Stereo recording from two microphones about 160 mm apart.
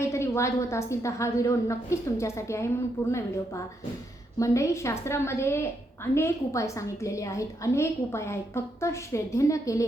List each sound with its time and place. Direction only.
0.0 s a woman's voice: 15° left (ahead or behind)